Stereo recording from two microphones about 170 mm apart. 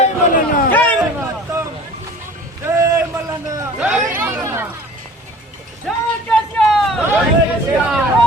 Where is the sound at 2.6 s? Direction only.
15° right (ahead or behind).